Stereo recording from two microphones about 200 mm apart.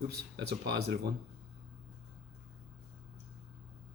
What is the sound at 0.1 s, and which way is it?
Speech, 55° right (ahead or behind).